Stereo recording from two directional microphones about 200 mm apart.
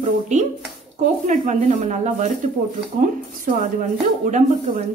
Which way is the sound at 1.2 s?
35° right (ahead or behind).